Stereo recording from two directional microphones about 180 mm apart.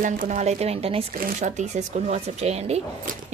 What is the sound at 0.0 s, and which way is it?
A woman's voice, 45° right (ahead or behind).